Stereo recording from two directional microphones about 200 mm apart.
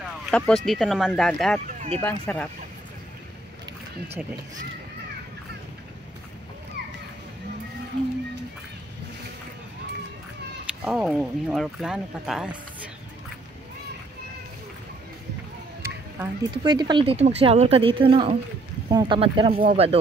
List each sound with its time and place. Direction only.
0.3 s speech: centre (ahead or behind)
1.7 s a sound: 40° right (ahead or behind)
2.0 s speech: 10° left (ahead or behind)
10.8 s speech: 5° right (ahead or behind)
15.8 s speech: 15° right (ahead or behind); by 20.0 s 35° right (ahead or behind)